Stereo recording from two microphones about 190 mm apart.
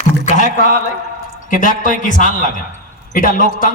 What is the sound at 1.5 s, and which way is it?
A man's voice, 45° left (ahead or behind).